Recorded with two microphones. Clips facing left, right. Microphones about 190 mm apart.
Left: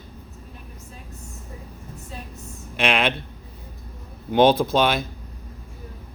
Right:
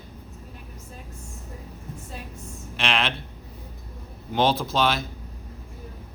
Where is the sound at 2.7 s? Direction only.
55° left (ahead or behind).